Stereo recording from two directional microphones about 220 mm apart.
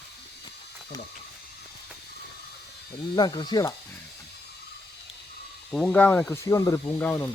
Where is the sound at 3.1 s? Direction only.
20° left (ahead or behind).